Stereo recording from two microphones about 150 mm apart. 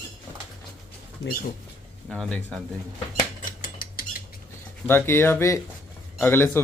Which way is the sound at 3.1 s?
65° left (ahead or behind).